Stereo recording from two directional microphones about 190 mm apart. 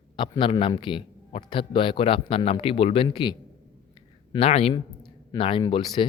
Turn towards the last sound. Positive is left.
turn(degrees=25)  # may be behind; listen again after turning